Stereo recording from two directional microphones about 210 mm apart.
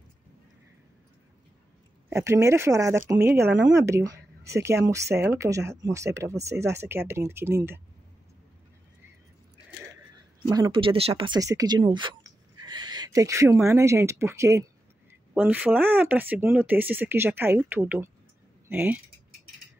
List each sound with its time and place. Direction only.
2.0 s speech: 15° right (ahead or behind)
10.5 s speech: 20° right (ahead or behind)